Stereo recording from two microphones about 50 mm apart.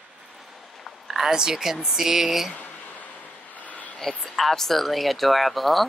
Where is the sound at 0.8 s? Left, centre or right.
Centre.